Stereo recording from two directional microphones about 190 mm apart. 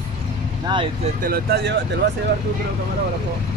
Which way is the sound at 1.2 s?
55° right (ahead or behind).